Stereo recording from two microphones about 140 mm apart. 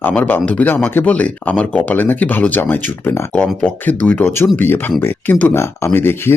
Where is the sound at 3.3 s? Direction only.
10° left (ahead or behind).